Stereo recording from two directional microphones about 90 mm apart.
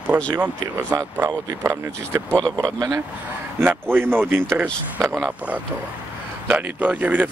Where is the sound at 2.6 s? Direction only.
40° right (ahead or behind).